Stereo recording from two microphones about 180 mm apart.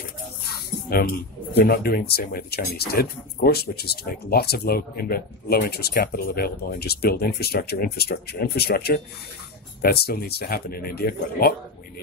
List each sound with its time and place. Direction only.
0.8 s speech: 55° left (ahead or behind)